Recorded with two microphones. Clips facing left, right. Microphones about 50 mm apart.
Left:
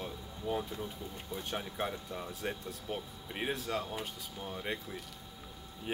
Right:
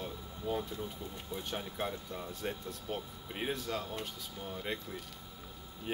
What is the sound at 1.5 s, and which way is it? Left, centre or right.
Speech, centre.